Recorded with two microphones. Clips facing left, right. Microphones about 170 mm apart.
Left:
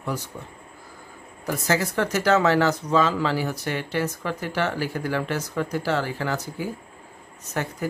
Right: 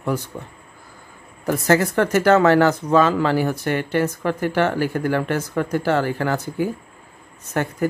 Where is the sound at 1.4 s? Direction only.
55° right (ahead or behind).